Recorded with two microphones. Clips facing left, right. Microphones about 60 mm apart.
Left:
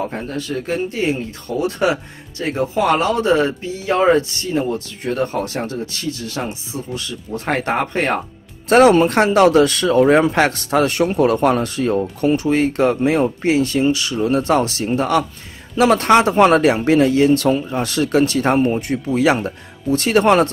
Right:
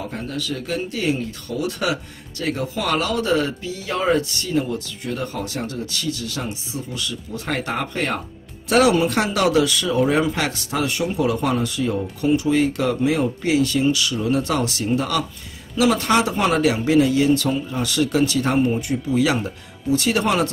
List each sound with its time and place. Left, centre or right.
0.0 s a man's voice: left
19.4 s speech: left